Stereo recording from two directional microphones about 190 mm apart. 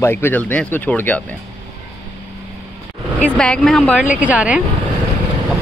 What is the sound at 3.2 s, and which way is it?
Speech, 5° left (ahead or behind).